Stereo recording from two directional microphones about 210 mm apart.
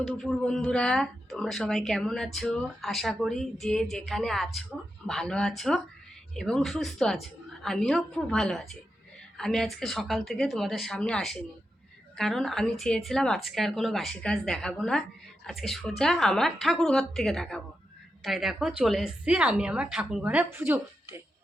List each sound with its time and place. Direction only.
0.0 s a woman's voice: centre (ahead or behind)